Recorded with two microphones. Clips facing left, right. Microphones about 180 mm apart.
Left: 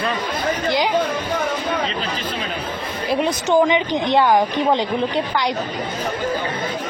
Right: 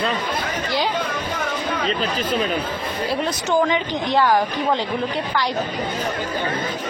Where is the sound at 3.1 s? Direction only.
20° left (ahead or behind).